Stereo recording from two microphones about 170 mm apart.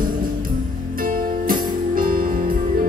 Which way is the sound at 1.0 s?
55° right (ahead or behind).